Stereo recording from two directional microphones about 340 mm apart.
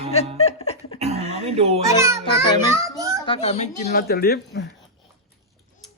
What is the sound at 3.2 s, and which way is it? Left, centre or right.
A man's voice, centre.